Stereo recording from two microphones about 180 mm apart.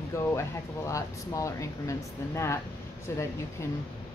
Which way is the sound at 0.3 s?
15° left (ahead or behind).